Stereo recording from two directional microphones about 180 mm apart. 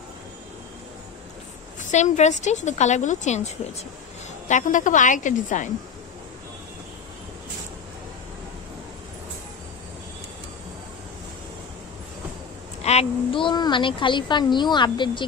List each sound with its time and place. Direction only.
1.8 s a woman's voice: 40° left (ahead or behind)
4.5 s a woman's voice: 45° left (ahead or behind)
12.8 s a woman's voice: 35° left (ahead or behind)